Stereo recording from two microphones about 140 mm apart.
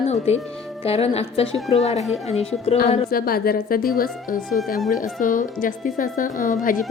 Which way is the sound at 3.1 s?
90° left.